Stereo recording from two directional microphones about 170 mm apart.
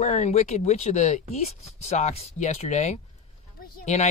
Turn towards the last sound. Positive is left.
turn(degrees=40)  # may be behind; listen again after turning